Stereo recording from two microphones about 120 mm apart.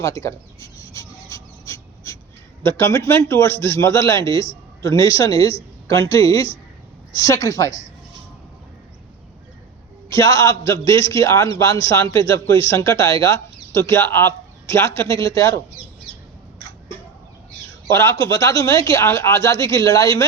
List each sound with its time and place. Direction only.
0.0 s a sound: 25° left (ahead or behind)
2.6 s speech: 25° left (ahead or behind)
10.1 s speech: 25° left (ahead or behind)
17.8 s speech: 25° left (ahead or behind)